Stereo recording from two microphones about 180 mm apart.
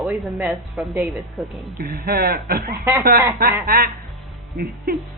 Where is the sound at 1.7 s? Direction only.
55° right (ahead or behind).